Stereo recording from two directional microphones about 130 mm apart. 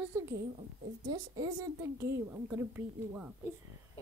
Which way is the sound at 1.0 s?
30° right (ahead or behind).